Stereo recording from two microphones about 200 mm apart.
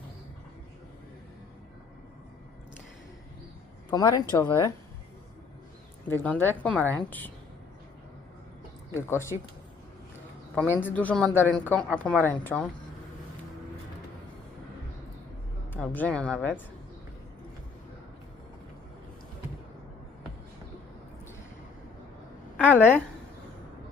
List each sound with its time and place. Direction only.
3.8 s speech: 20° left (ahead or behind)
6.1 s speech: 10° left (ahead or behind)
9.0 s speech: 15° left (ahead or behind)
10.5 s speech: 10° left (ahead or behind)
15.7 s speech: 10° left (ahead or behind)
22.5 s a woman's voice: 10° left (ahead or behind)